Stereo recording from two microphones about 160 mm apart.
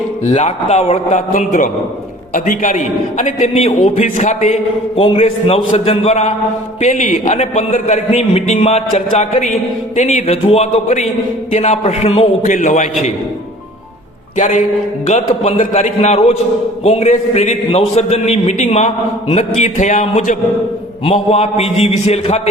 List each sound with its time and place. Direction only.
0.3 s a man's voice: 40° left (ahead or behind)
2.3 s a man's voice: 55° left (ahead or behind); by 12.3 s 40° left (ahead or behind)
12.4 s a man's voice: 50° left (ahead or behind)
14.3 s a man's voice: 50° left (ahead or behind)
21.2 s a man's voice: 40° left (ahead or behind)